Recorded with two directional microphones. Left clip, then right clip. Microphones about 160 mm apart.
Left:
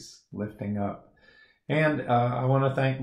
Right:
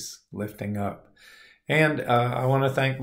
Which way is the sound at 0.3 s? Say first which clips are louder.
Right 1 dB; 15° right (ahead or behind).